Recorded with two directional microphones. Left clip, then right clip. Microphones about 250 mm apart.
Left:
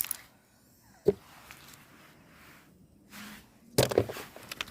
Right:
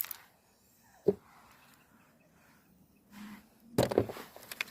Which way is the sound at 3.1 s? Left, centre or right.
Left.